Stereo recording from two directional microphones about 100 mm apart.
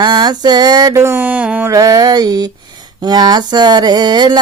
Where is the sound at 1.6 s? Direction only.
35° right (ahead or behind).